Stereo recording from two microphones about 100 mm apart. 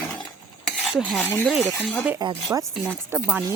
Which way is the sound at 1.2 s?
20° left (ahead or behind).